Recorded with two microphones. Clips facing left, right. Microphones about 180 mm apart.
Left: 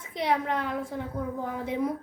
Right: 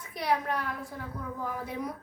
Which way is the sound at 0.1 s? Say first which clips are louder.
Left 2 dB; 25° left (ahead or behind).